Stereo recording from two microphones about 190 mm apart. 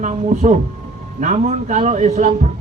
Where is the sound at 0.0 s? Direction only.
40° right (ahead or behind).